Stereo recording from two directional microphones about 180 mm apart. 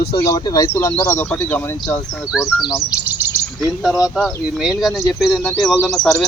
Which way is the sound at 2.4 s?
15° left (ahead or behind).